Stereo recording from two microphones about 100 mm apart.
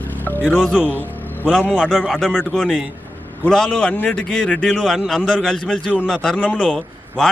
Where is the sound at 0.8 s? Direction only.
15° left (ahead or behind).